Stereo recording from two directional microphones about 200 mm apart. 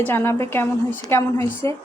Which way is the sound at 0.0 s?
10° left (ahead or behind).